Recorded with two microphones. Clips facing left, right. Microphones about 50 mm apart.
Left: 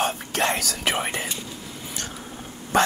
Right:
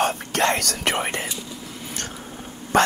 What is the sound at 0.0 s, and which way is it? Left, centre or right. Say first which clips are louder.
Speech: right 3 dB; right.